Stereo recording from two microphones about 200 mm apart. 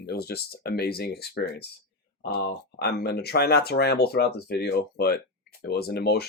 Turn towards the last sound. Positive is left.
turn(degrees=50)  # may be behind; listen again after turning